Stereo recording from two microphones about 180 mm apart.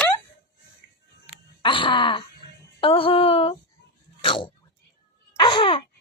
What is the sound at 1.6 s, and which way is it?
Groan, 25° left (ahead or behind).